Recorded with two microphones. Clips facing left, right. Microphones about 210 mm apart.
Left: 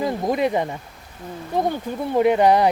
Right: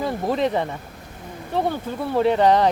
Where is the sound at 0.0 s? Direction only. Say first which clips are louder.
Left 1 dB; 10° left (ahead or behind).